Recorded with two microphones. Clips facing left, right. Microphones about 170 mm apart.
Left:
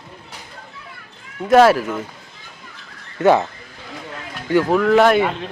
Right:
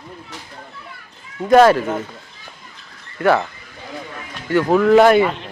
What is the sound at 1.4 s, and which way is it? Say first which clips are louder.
Speech: right 1 dB; 5° left (ahead or behind).